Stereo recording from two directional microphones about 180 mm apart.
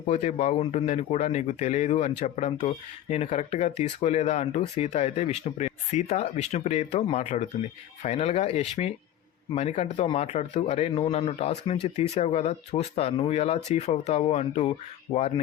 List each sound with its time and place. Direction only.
0.1 s speech: 40° left (ahead or behind)